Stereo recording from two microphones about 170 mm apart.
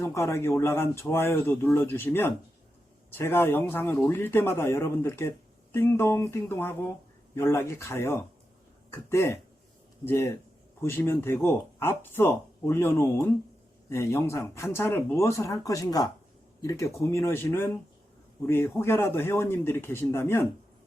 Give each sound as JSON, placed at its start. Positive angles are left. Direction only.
{"t": 0.0, "sound": "speech", "side_deg": 15}